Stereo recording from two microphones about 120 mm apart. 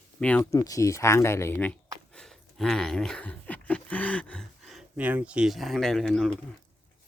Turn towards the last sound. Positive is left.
turn(degrees=5)  # may be behind; listen again after turning